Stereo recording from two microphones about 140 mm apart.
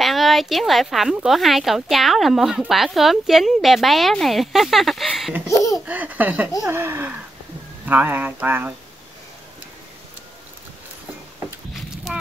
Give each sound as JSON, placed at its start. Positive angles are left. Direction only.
{"t": 0.0, "sound": "speech", "side_deg": 0}
{"t": 5.5, "sound": "speech", "side_deg": 25}
{"t": 5.9, "sound": "speech", "side_deg": -10}
{"t": 11.7, "sound": "a sound", "side_deg": -5}